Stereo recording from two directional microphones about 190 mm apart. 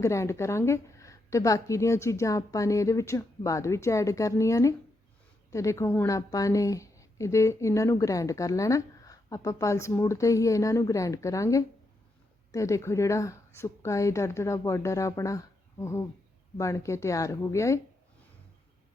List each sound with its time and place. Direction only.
0.0 s a woman's voice: 15° left (ahead or behind)